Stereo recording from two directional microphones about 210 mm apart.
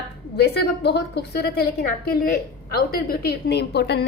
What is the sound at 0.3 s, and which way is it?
A woman's voice, 50° left (ahead or behind).